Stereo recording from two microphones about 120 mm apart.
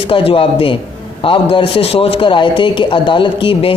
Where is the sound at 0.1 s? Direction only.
50° left (ahead or behind).